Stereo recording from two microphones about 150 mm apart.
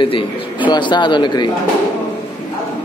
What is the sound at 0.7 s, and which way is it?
Speech, 30° left (ahead or behind).